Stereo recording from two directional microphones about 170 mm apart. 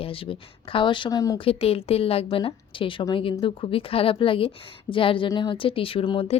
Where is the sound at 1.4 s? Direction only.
35° left (ahead or behind).